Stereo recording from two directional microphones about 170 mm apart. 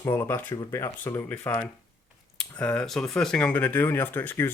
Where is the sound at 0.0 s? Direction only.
15° left (ahead or behind).